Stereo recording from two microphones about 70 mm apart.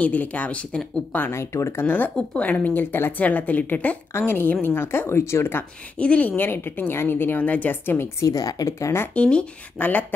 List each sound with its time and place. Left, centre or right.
0.0 s a woman's voice: left
1.3 s a woman's voice: left
2.1 s a woman's voice: centre; by 5.7 s left
5.9 s a woman's voice: centre
8.2 s speech: left
9.1 s a woman's voice: centre